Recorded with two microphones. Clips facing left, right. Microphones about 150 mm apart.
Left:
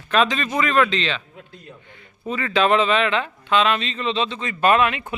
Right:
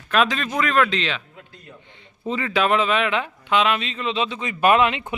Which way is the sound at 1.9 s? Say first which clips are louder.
Right 1 dB; 25° right (ahead or behind).